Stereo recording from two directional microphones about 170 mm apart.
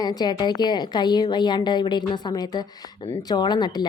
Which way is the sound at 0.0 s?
25° left (ahead or behind).